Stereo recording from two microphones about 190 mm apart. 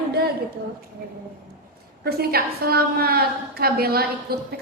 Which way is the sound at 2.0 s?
55° right (ahead or behind).